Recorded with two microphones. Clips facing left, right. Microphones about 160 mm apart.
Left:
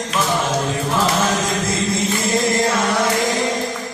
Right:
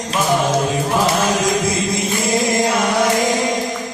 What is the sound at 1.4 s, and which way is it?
Chant, 15° right (ahead or behind).